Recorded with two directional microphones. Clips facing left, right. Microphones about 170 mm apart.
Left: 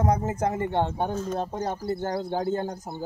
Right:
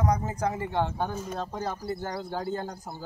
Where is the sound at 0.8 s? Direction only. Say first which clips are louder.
Left 3 dB; 20° left (ahead or behind).